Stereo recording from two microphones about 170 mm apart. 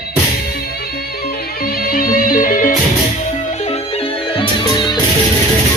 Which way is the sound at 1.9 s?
55° left (ahead or behind).